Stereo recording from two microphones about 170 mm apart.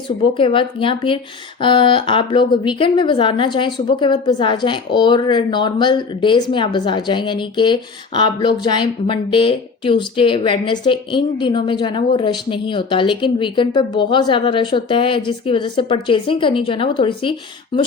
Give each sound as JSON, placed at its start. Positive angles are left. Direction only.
{"t": 0.3, "sound": "a woman's voice", "side_deg": 30}